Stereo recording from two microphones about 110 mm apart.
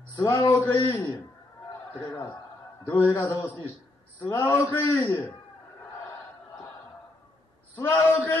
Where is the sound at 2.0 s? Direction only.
20° left (ahead or behind).